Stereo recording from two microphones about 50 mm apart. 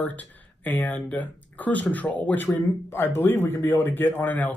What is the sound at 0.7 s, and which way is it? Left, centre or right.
Speech, left.